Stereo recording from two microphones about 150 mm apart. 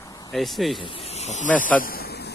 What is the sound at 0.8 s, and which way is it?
Speech, 40° left (ahead or behind).